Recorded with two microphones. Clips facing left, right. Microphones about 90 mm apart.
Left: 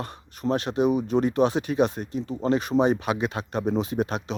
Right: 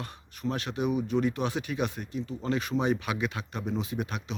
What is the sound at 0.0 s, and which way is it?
Speech, 35° left (ahead or behind).